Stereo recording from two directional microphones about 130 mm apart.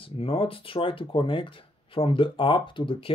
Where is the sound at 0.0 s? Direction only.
45° left (ahead or behind).